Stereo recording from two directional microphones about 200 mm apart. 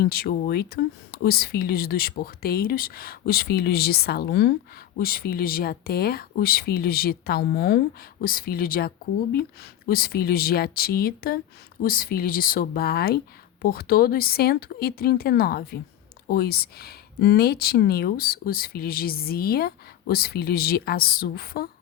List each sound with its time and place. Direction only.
0.0 s speech: 50° left (ahead or behind)